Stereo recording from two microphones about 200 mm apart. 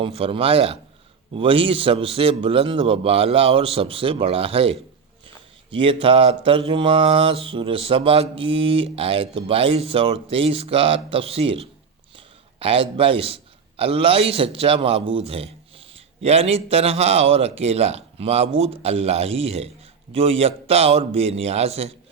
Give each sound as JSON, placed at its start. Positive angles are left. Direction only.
{"t": 0.0, "sound": "mantra", "side_deg": -25}
{"t": 12.1, "sound": "a man's voice", "side_deg": -25}